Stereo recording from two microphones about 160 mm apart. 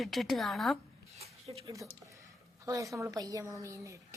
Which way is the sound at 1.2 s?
40° right (ahead or behind).